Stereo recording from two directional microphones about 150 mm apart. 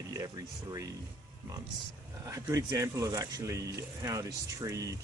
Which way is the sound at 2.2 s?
20° right (ahead or behind).